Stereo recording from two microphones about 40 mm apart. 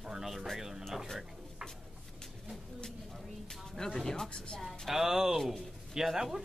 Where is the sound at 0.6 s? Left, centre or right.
Centre.